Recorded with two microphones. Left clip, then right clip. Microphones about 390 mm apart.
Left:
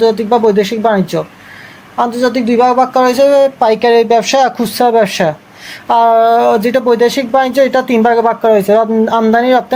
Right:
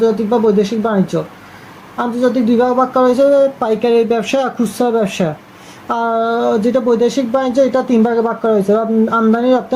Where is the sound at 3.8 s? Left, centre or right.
Centre.